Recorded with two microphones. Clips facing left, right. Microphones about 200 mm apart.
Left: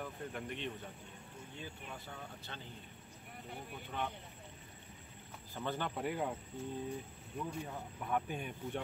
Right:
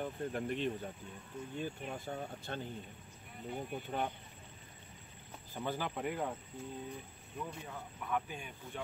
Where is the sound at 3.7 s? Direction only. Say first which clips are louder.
Right 3 dB; 40° right (ahead or behind).